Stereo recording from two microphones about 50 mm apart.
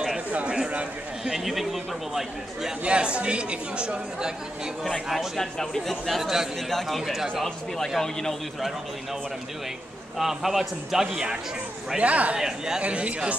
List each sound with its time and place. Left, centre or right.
1.2 s a man's voice: centre
2.8 s speech: right
5.1 s a man's voice: centre
10.1 s a man's voice: centre
12.0 s speech: right
12.4 s speech: centre
12.8 s speech: right